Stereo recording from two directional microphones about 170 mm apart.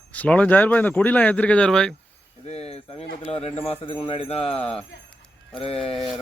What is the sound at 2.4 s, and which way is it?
Speech, 40° left (ahead or behind).